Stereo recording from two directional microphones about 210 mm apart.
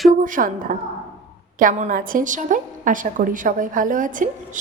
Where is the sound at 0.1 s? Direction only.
40° right (ahead or behind).